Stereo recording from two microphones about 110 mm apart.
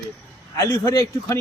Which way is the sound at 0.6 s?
35° left (ahead or behind).